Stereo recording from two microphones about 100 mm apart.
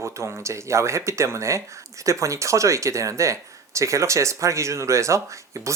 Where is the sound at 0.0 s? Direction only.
30° right (ahead or behind).